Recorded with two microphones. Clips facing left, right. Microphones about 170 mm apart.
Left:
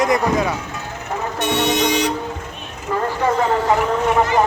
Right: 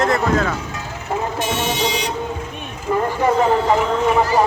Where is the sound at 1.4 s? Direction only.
70° left (ahead or behind).